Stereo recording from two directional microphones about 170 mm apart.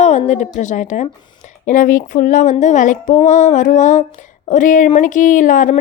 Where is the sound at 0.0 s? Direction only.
40° left (ahead or behind).